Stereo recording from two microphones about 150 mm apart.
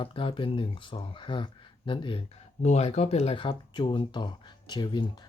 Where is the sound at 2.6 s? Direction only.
45° left (ahead or behind).